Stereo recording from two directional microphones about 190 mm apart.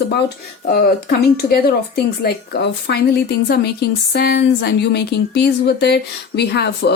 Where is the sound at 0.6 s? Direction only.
55° left (ahead or behind).